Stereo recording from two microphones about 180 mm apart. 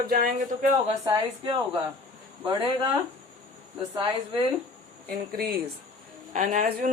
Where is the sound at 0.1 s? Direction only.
55° right (ahead or behind).